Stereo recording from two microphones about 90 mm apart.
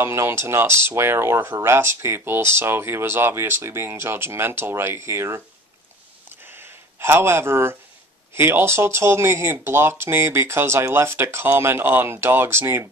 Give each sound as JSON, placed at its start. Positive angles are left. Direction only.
{"t": 0.0, "sound": "speech", "side_deg": -30}
{"t": 6.2, "sound": "a sound", "side_deg": -25}
{"t": 8.4, "sound": "speech", "side_deg": -25}